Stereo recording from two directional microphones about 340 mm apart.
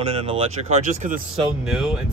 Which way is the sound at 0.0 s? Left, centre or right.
Centre.